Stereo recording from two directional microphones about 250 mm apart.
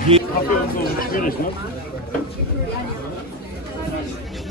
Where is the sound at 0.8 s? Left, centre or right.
Left.